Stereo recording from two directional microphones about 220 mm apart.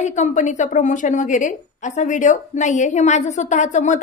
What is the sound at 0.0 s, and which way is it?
A woman's voice, 35° left (ahead or behind).